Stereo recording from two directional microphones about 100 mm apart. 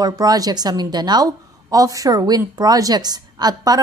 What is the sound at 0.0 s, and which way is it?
A woman's voice, 40° right (ahead or behind).